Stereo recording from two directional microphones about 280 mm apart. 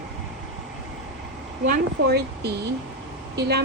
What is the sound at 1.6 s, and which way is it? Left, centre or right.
Speech, right.